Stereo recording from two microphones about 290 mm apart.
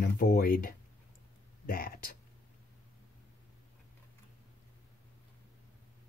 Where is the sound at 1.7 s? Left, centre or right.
Left.